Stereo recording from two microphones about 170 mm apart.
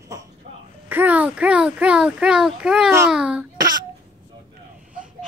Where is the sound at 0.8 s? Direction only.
10° right (ahead or behind).